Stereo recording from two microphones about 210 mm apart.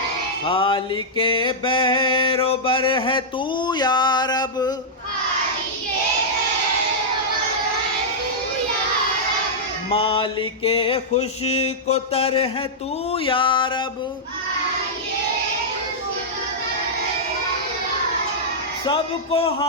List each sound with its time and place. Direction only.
0.4 s mantra: 25° left (ahead or behind)
3.7 s a sound: 20° left (ahead or behind)
9.9 s mantra: 25° left (ahead or behind)
18.9 s mantra: 25° left (ahead or behind)